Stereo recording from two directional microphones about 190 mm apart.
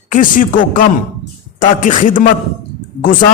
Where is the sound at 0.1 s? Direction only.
45° left (ahead or behind).